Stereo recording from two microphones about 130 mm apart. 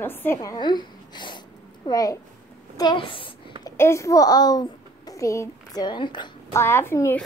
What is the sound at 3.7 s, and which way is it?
A child's voice, 20° left (ahead or behind).